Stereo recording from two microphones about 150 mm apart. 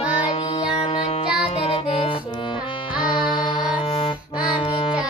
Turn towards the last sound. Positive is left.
turn(degrees=30)  # may be behind; listen again after turning